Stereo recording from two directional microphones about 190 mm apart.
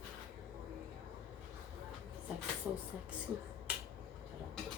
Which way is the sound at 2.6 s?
15° right (ahead or behind).